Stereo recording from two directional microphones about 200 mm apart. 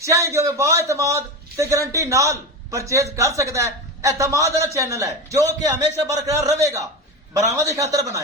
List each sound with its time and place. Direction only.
0.0 s a man's voice: 15° right (ahead or behind)